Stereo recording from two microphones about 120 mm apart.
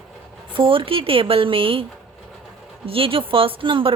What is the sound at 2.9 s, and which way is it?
Speech, 50° right (ahead or behind).